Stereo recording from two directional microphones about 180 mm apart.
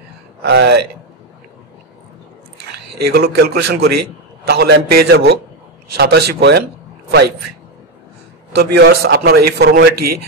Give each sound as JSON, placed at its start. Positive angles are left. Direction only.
{"t": 0.4, "sound": "a man's voice", "side_deg": -65}
{"t": 3.1, "sound": "a man's voice", "side_deg": -60}
{"t": 8.5, "sound": "a man's voice", "side_deg": -65}